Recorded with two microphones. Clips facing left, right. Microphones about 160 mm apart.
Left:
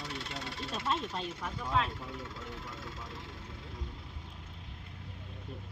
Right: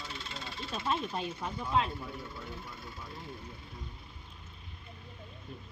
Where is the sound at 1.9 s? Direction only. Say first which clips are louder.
Right 1 dB; 90° left.